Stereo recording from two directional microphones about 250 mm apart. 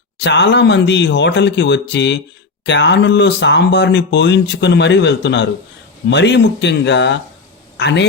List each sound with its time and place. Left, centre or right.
0.2 s a man's voice: left